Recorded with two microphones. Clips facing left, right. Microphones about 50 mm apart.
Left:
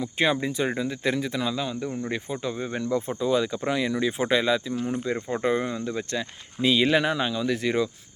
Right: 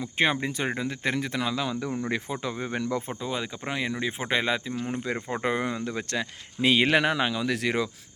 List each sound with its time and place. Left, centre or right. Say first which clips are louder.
0.0 s speech: left 1 dB; right
3.1 s speech: left 7 dB; right
4.4 s speech: left 3 dB; right
5.3 s speech: left 2 dB; right